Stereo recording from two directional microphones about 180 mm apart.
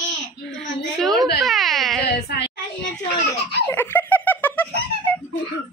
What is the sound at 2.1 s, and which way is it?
Child singing, 65° left (ahead or behind).